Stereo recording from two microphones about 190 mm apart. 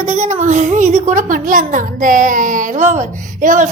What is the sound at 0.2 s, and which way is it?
A woman's voice, 40° right (ahead or behind).